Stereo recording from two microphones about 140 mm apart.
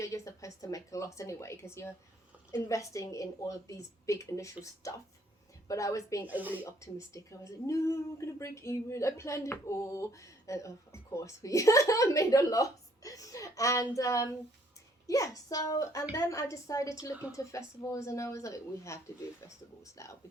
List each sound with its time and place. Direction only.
0.0 s a woman's voice: 25° left (ahead or behind)
6.2 s speech: 10° right (ahead or behind)
6.7 s speech: 20° left (ahead or behind)
20.0 s speech: 25° left (ahead or behind)